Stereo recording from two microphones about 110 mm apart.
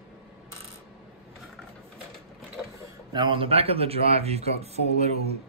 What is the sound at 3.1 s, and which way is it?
Speech, 50° right (ahead or behind).